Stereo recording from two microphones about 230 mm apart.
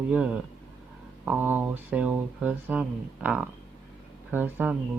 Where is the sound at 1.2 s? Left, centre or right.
Centre.